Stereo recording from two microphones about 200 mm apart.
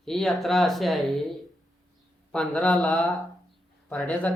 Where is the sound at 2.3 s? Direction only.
5° left (ahead or behind).